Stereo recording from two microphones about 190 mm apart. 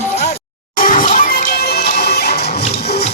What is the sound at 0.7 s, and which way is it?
Music, 45° left (ahead or behind).